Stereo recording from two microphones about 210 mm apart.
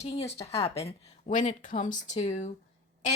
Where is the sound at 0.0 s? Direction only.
30° left (ahead or behind).